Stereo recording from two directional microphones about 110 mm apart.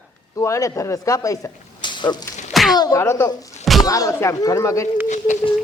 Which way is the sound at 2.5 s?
Centre (ahead or behind).